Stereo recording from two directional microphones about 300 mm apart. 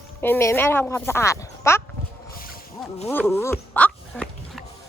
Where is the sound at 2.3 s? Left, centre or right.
Left.